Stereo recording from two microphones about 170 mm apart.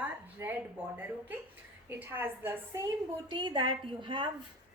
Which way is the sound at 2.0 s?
10° right (ahead or behind).